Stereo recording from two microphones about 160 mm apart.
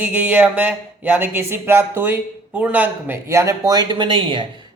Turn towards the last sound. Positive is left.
turn(degrees=-35)  # may be behind; listen again after turning